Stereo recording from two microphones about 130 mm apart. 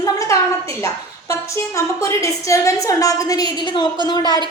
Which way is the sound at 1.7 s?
25° left (ahead or behind).